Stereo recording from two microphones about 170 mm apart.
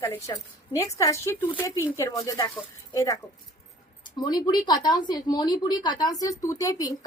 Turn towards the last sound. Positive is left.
turn(degrees=20)  # may be behind; listen again after turning